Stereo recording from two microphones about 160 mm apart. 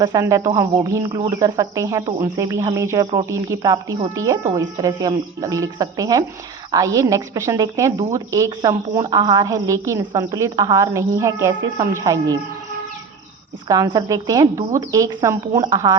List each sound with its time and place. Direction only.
0.0 s a woman's voice: 20° right (ahead or behind)
13.7 s a woman's voice: 20° right (ahead or behind)